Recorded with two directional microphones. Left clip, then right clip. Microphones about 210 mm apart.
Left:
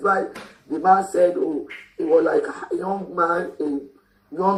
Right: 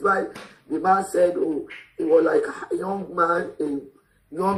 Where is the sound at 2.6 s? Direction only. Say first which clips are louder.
Left 2 dB; 40° right (ahead or behind).